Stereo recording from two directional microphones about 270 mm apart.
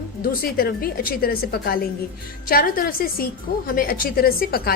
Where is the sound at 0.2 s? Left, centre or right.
Left.